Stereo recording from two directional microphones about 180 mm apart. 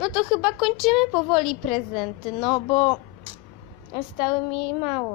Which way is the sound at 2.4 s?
25° left (ahead or behind).